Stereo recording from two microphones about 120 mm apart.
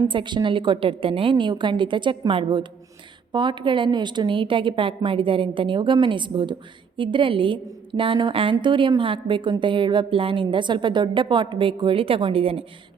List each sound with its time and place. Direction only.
0.1 s a woman's voice: 40° right (ahead or behind)